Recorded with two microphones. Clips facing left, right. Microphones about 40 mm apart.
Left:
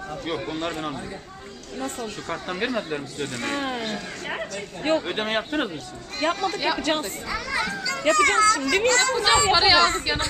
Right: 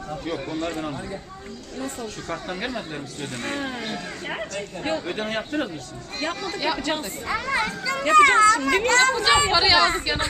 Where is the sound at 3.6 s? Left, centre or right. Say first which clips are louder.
Left 2 dB; centre.